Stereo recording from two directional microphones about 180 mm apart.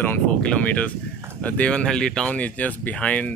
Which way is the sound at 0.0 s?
10° left (ahead or behind).